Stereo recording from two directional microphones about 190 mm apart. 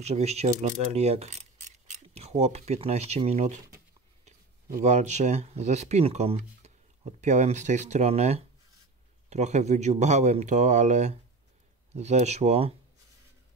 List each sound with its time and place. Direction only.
0.0 s speech: 35° right (ahead or behind)
0.6 s mechanisms: 35° right (ahead or behind)
4.8 s speech: 35° right (ahead or behind)